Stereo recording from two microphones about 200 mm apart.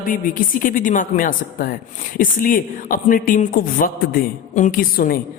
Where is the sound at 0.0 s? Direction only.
45° left (ahead or behind).